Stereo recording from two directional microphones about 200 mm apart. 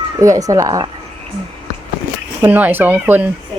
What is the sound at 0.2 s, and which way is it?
Speech, 15° right (ahead or behind).